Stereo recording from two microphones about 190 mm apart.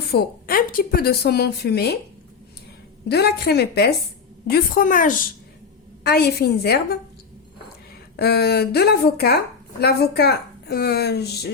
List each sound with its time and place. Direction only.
0.1 s speech: 55° left (ahead or behind)
3.1 s speech: 55° left (ahead or behind)
6.0 s speech: 55° left (ahead or behind)
8.1 s speech: 60° left (ahead or behind)